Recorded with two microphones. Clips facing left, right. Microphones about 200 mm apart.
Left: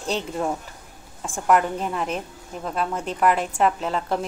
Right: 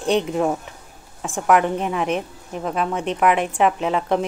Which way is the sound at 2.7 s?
55° right (ahead or behind).